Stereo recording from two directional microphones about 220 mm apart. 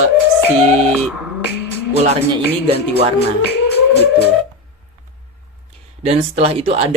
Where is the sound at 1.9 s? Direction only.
30° right (ahead or behind).